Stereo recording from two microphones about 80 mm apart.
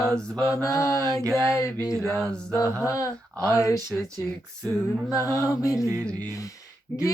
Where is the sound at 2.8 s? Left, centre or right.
Left.